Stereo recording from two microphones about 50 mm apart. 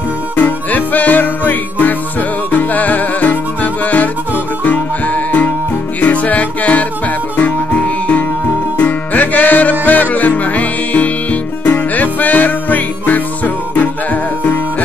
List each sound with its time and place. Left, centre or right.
0.4 s music: left